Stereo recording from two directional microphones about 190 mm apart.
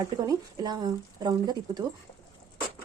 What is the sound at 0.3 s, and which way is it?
Speech, 20° right (ahead or behind).